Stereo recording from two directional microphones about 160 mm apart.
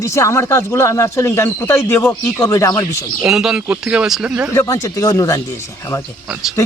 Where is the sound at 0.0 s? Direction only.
20° left (ahead or behind).